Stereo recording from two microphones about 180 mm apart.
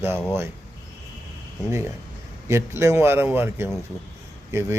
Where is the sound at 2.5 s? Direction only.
15° right (ahead or behind).